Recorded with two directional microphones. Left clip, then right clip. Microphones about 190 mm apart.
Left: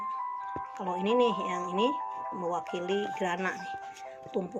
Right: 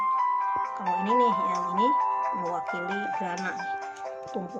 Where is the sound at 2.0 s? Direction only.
35° right (ahead or behind).